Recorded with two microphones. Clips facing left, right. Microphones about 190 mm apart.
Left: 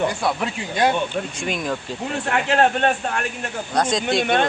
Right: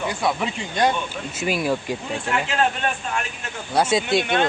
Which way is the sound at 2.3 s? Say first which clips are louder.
Left 4 dB; 60° left (ahead or behind).